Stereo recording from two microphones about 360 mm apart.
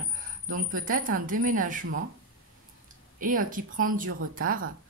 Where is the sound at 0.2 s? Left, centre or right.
Right.